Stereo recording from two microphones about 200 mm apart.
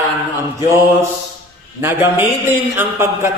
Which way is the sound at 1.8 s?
10° right (ahead or behind).